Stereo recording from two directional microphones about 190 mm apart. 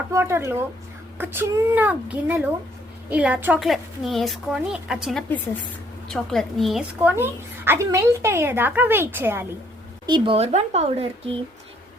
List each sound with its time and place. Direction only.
0.1 s a woman's voice: 15° right (ahead or behind)
10.1 s speech: 25° right (ahead or behind)